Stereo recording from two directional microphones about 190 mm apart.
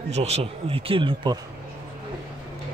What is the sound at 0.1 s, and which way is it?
Speech, 35° right (ahead or behind).